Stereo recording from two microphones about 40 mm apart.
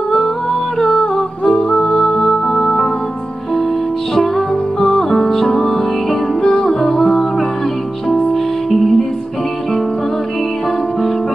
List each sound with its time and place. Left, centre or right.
0.7 s music: centre
1.4 s music: centre
4.7 s music: centre
8.6 s music: centre